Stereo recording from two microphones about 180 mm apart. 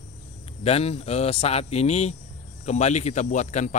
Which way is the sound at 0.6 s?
35° left (ahead or behind).